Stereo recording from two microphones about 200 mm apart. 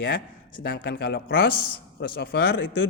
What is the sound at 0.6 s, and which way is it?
A man's voice, 50° left (ahead or behind).